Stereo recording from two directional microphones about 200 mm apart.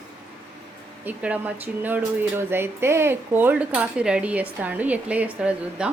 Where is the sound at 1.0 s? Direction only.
5° right (ahead or behind).